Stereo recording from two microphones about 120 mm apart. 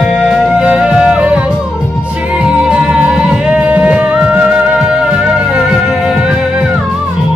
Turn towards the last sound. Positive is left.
turn(degrees=-5)  # may be behind; listen again after turning